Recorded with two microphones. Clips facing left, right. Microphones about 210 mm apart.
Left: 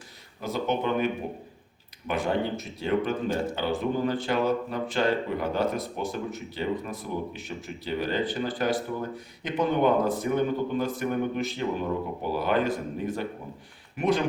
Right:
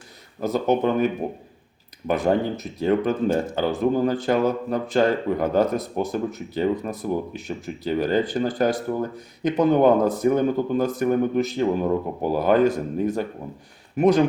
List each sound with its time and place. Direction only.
0.4 s speech: 45° right (ahead or behind)